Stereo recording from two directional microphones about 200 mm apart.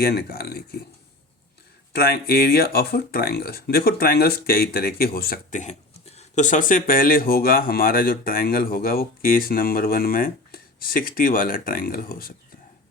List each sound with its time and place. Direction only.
0.0 s speech: 50° left (ahead or behind)
1.9 s speech: 50° left (ahead or behind)